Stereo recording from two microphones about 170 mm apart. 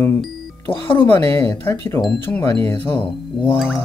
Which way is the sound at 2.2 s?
15° left (ahead or behind).